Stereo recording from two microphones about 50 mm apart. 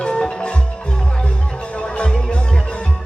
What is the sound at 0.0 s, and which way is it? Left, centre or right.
Music, centre.